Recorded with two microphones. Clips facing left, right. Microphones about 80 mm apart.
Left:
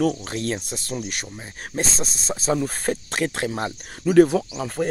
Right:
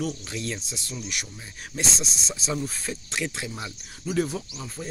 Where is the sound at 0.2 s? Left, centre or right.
Left.